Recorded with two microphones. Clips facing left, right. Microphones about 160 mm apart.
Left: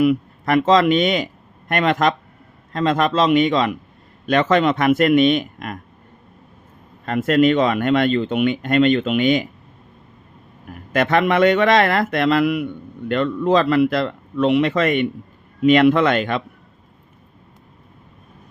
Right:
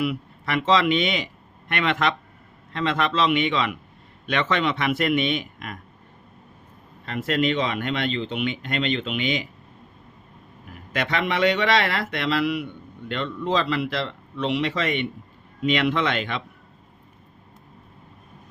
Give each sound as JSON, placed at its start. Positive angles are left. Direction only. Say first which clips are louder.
{"t": 0.0, "sound": "a man's voice", "louder": "left 9 dB", "side_deg": 45}
{"t": 7.0, "sound": "speech", "louder": "left 8 dB", "side_deg": 50}
{"t": 10.7, "sound": "speech", "louder": "left 8 dB", "side_deg": 50}